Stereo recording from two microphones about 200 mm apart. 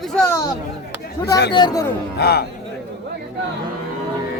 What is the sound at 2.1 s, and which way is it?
Speech, 55° left (ahead or behind).